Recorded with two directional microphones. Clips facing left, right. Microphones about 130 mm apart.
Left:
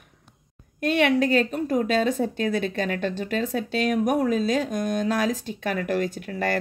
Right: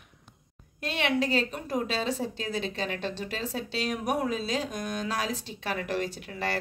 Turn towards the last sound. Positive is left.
turn(degrees=50)  # may be behind; listen again after turning